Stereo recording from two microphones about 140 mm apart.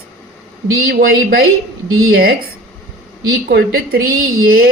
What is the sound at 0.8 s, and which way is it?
Speech, 90° right.